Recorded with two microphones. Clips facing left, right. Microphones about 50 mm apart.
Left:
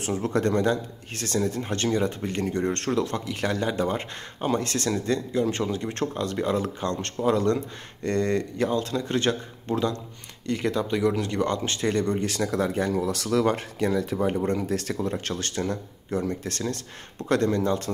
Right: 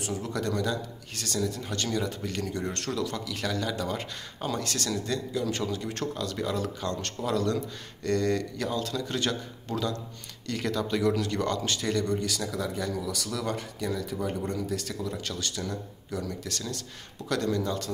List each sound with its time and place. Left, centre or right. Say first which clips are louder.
0.0 s speech: left 6 dB; left
14.5 s speech: left 5 dB; left